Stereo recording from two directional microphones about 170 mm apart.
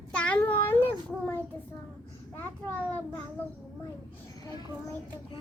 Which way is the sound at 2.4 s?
10° left (ahead or behind).